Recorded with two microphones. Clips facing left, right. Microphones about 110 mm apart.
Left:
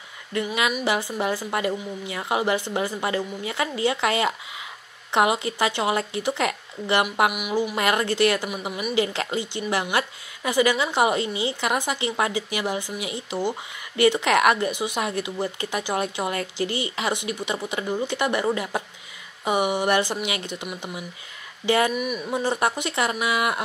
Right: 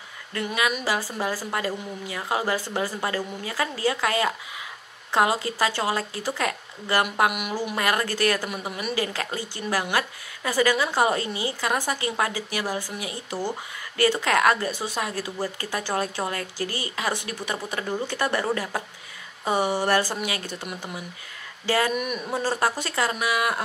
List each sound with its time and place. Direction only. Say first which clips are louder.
0.3 s a woman's voice: left 2 dB; 20° left (ahead or behind)
7.2 s a sound: left 1 dB; 5° left (ahead or behind)
7.7 s a woman's voice: left 2 dB; 20° left (ahead or behind)
19.4 s a sound: left 1 dB; 15° left (ahead or behind)
20.2 s a woman's voice: left 1 dB; 20° left (ahead or behind)
21.6 s a woman's voice: left 3 dB; 20° left (ahead or behind)
21.9 s speech: left 1 dB; centre (ahead or behind)
22.3 s a woman's voice: left 1 dB; 20° left (ahead or behind)